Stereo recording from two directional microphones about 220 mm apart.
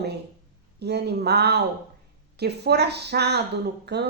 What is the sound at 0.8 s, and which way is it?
Speech, 50° right (ahead or behind).